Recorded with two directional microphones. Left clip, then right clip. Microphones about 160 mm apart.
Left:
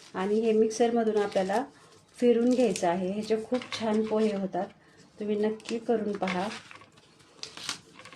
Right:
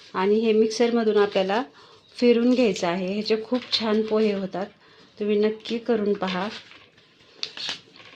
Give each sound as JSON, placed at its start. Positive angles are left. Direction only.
{"t": 0.1, "sound": "speech", "side_deg": -35}